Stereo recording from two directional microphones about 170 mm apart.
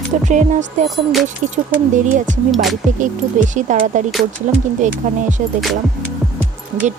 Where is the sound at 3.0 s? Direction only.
50° right (ahead or behind).